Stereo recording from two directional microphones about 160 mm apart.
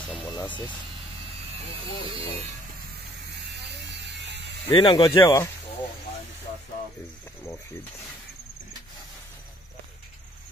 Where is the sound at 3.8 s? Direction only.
90° right.